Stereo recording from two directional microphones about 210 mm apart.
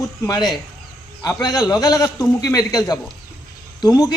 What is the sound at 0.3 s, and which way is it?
A man's voice, 20° left (ahead or behind).